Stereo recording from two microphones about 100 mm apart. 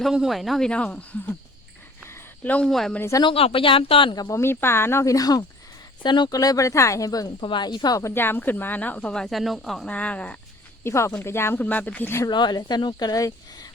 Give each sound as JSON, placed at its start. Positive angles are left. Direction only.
{"t": 0.0, "sound": "speech", "side_deg": -5}
{"t": 2.0, "sound": "a sound", "side_deg": 25}
{"t": 2.5, "sound": "speech", "side_deg": 5}
{"t": 3.3, "sound": "speech", "side_deg": 70}
{"t": 4.1, "sound": "speech", "side_deg": 45}
{"t": 4.4, "sound": "speech", "side_deg": 25}
{"t": 6.0, "sound": "speech", "side_deg": 50}
{"t": 7.4, "sound": "speech", "side_deg": 50}
{"t": 8.1, "sound": "speech", "side_deg": 20}
{"t": 9.9, "sound": "speech", "side_deg": 15}
{"t": 10.8, "sound": "speech", "side_deg": 25}
{"t": 12.3, "sound": "speech", "side_deg": 45}